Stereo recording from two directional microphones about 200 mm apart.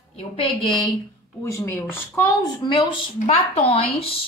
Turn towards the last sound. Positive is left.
turn(degrees=30)  # may be behind; listen again after turning